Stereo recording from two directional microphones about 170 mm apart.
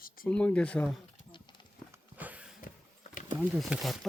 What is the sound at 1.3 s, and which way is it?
Clip-clop, 25° left (ahead or behind).